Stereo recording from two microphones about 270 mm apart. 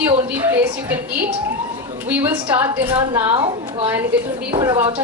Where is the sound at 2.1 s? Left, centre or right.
Centre.